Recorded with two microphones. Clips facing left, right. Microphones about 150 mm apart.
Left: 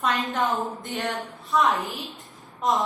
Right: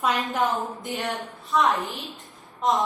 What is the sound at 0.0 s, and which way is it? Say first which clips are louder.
A woman's voice: right 1 dB; centre (ahead or behind).